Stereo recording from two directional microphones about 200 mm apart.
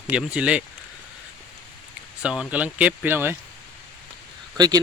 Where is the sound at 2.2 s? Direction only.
5° right (ahead or behind).